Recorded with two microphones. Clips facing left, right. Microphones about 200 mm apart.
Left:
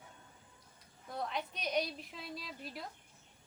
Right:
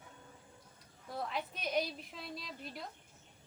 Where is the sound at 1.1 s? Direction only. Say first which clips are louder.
Even; centre (ahead or behind).